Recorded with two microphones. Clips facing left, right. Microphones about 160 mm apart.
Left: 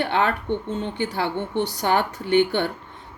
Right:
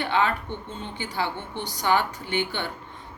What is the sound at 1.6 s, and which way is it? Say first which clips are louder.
Speech: left 2 dB; 55° left (ahead or behind).